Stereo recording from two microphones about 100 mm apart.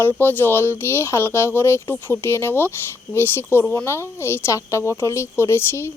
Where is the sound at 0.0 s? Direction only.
20° left (ahead or behind).